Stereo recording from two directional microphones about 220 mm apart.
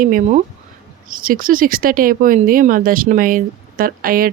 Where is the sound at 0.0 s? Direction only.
35° right (ahead or behind).